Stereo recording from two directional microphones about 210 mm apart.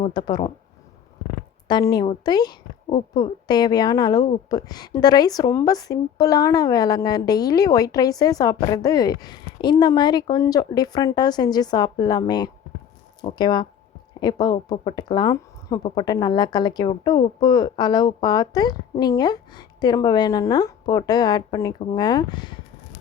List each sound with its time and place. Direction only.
0.0 s a woman's voice: 20° left (ahead or behind)
1.6 s a woman's voice: 20° left (ahead or behind)